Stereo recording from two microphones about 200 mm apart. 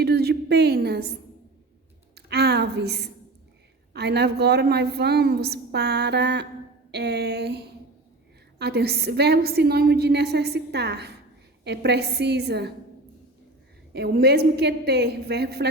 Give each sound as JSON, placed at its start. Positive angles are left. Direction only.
{"t": 0.0, "sound": "a woman's voice", "side_deg": -55}
{"t": 2.1, "sound": "a woman's voice", "side_deg": -55}
{"t": 13.9, "sound": "a woman's voice", "side_deg": -55}